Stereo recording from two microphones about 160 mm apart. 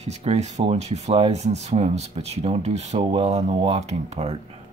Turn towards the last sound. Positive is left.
turn(degrees=-40)  # may be behind; listen again after turning